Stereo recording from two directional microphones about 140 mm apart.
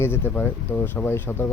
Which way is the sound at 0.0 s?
15° left (ahead or behind).